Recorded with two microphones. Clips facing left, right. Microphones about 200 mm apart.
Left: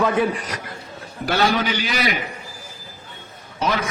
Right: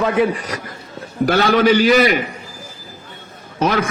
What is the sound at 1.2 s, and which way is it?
Speech, 50° right (ahead or behind).